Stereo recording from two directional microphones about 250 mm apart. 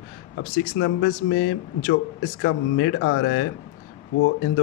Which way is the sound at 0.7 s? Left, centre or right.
Left.